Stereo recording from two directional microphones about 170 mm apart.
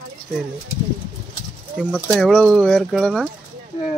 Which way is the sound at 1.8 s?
Centre (ahead or behind).